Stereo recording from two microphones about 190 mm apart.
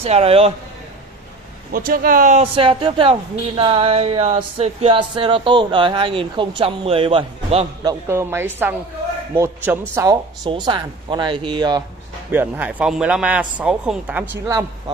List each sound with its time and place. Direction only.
0.0 s speech: 30° right (ahead or behind)
1.7 s speech: 50° right (ahead or behind)
2.5 s speech: 25° right (ahead or behind)
8.1 s speech: 10° right (ahead or behind)
10.4 s speech: 25° right (ahead or behind)
12.3 s speech: 10° right (ahead or behind)